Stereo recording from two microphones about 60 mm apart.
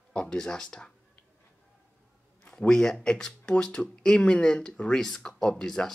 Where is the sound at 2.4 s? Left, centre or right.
Centre.